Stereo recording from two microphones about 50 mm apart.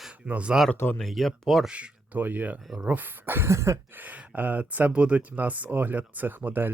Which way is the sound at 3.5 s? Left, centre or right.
Right.